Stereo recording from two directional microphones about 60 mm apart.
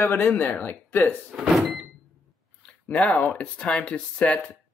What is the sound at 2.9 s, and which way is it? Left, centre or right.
Speech, left.